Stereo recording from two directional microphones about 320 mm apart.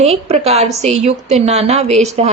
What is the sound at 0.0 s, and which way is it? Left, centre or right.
A woman's voice, centre.